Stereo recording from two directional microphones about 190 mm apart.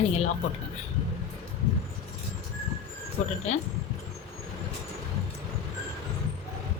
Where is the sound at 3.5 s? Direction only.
35° left (ahead or behind).